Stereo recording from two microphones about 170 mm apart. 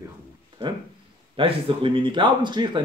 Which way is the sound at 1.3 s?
30° right (ahead or behind).